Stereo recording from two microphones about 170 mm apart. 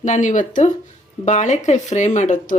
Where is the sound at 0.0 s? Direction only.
45° left (ahead or behind).